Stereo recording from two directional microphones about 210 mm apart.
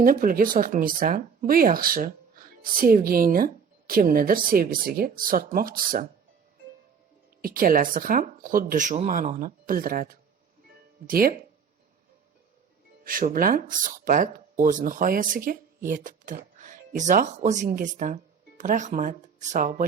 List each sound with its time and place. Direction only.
0.0 s speech: 40° right (ahead or behind)
7.4 s speech: 45° right (ahead or behind)
13.1 s speech: 40° right (ahead or behind)